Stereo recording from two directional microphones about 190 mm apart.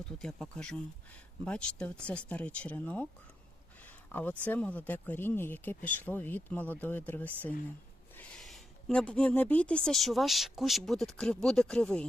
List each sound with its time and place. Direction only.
0.0 s speech: 5° left (ahead or behind)